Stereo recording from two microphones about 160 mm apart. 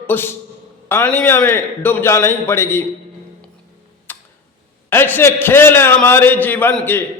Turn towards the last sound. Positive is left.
turn(degrees=10)  # may be behind; listen again after turning